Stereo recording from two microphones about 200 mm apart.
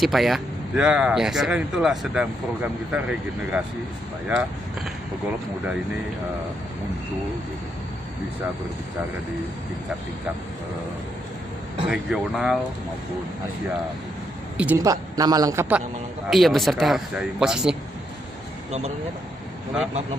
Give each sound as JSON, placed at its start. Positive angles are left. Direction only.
{"t": 0.0, "sound": "speech", "side_deg": 0}
{"t": 11.9, "sound": "speech", "side_deg": 0}
{"t": 14.6, "sound": "a man's voice", "side_deg": -15}
{"t": 16.3, "sound": "speech", "side_deg": 0}